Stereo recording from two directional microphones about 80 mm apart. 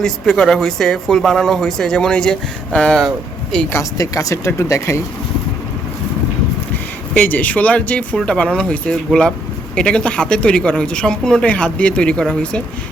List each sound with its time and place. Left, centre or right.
0.0 s speech: centre
3.9 s speech: left
7.2 s speech: left